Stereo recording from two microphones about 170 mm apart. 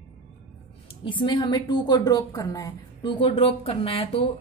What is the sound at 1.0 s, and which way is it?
A woman's voice, 25° left (ahead or behind).